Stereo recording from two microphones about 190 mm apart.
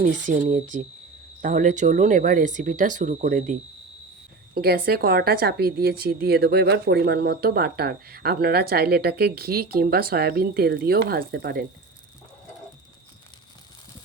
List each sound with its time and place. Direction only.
0.0 s speech: 40° right (ahead or behind)
4.5 s a woman's voice: 55° right (ahead or behind)